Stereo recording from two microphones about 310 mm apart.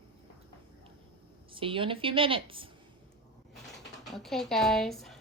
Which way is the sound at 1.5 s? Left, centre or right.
Centre.